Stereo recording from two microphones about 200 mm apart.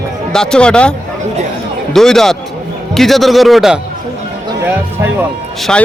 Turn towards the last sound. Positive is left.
turn(degrees=5)  # may be behind; listen again after turning